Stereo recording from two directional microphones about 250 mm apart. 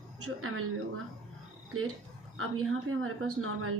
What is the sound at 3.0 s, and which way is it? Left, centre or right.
Speech, right.